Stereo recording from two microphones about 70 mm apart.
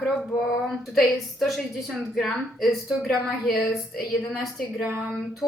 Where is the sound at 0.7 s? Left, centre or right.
Centre.